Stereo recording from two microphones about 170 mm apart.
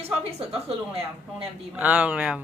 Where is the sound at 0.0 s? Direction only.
35° right (ahead or behind).